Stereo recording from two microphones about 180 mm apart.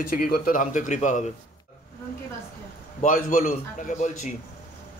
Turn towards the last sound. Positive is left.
turn(degrees=45)  # may be behind; listen again after turning